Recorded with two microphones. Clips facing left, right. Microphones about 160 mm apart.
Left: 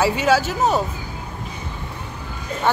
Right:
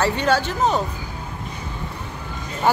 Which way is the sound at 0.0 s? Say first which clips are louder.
Left 2 dB; 5° left (ahead or behind).